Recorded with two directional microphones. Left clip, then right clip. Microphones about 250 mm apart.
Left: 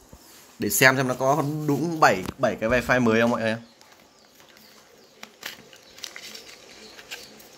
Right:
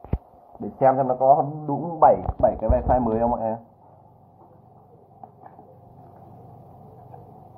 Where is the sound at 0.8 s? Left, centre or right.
Left.